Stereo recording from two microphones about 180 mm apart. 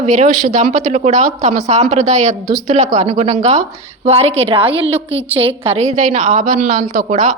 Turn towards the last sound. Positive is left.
turn(degrees=-40)  # may be behind; listen again after turning